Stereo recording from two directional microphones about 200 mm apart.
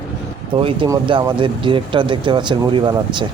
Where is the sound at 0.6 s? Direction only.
25° right (ahead or behind).